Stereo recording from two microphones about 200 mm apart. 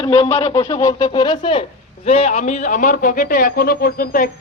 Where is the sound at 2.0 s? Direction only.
30° left (ahead or behind).